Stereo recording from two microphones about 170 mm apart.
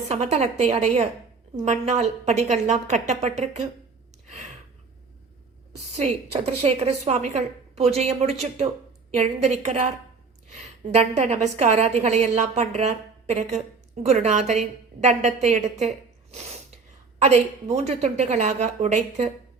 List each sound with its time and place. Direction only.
0.1 s a woman's voice: 40° right (ahead or behind)
4.3 s gasp: 45° right (ahead or behind)
6.0 s a woman's voice: 40° right (ahead or behind)
17.2 s a woman's voice: 40° right (ahead or behind)